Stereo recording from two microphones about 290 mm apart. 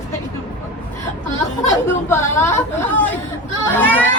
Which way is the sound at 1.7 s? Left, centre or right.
Centre.